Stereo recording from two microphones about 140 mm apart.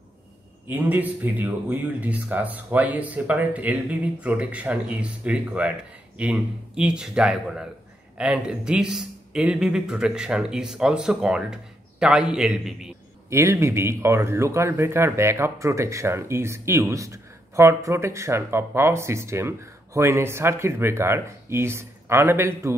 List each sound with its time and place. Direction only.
0.7 s speech: 10° right (ahead or behind)
13.3 s speech: 20° right (ahead or behind)